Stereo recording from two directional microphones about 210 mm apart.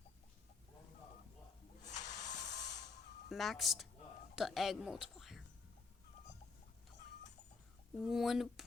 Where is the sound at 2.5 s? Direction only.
35° left (ahead or behind).